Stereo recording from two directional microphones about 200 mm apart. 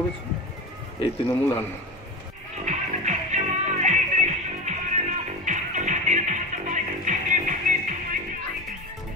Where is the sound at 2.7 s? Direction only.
35° right (ahead or behind).